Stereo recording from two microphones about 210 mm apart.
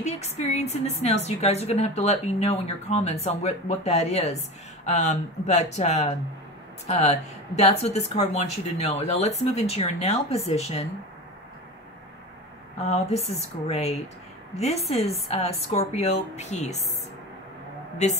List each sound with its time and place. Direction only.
0.0 s a woman's voice: 30° left (ahead or behind)
12.8 s a woman's voice: 30° left (ahead or behind)
18.0 s a woman's voice: 35° left (ahead or behind)